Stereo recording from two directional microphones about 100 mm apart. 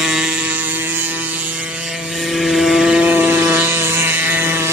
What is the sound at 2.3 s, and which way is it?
Vehicle, centre (ahead or behind).